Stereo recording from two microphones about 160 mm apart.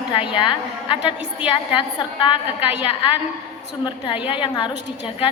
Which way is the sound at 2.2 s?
30° left (ahead or behind).